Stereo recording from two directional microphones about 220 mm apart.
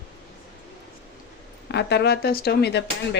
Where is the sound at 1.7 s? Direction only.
50° left (ahead or behind).